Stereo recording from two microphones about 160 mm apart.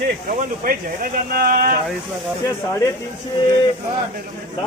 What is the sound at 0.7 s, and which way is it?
Speech, 65° right (ahead or behind).